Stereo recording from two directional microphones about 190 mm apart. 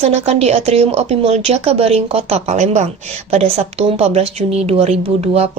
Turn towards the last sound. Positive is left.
turn(degrees=-35)  # may be behind; listen again after turning